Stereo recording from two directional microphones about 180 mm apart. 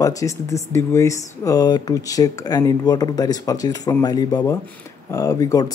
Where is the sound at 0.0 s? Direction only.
15° left (ahead or behind).